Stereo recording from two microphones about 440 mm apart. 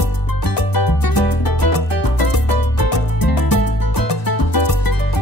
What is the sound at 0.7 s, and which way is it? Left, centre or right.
Music, left.